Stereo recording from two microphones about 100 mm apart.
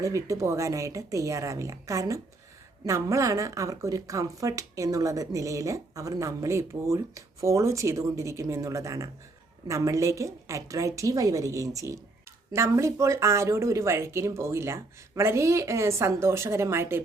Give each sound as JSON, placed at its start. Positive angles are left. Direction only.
{"t": 0.0, "sound": "speech", "side_deg": -30}